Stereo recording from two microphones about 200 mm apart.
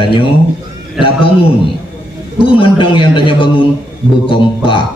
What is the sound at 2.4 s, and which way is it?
A man's voice, 25° left (ahead or behind).